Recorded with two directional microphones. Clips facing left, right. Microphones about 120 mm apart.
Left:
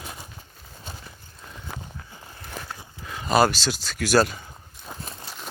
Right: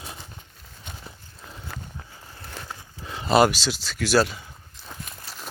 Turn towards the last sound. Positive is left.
turn(degrees=0)  # may be behind; listen again after turning